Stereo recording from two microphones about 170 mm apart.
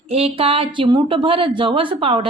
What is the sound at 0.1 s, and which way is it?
A woman's voice, 35° right (ahead or behind).